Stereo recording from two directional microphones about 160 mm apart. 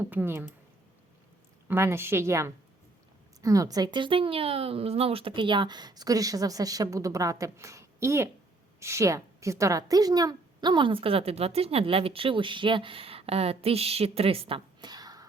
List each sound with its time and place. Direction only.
0.0 s speech: 10° right (ahead or behind)
1.6 s a woman's voice: 15° right (ahead or behind)